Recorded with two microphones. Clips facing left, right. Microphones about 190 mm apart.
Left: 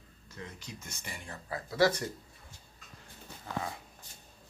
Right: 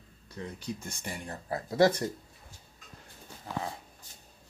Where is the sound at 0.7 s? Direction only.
35° right (ahead or behind).